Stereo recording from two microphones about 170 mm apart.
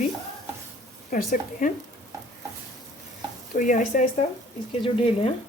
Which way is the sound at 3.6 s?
50° left (ahead or behind).